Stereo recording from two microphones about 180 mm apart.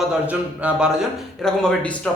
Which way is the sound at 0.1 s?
5° right (ahead or behind).